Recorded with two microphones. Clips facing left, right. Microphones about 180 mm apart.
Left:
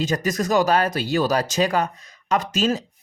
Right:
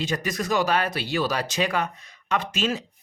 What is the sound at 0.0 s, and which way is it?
Speech, 45° left (ahead or behind).